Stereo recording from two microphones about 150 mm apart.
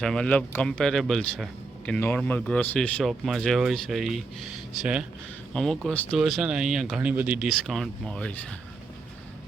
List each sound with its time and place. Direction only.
0.0 s speech: 5° left (ahead or behind)